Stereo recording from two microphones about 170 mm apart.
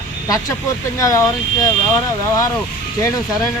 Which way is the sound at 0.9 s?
20° left (ahead or behind).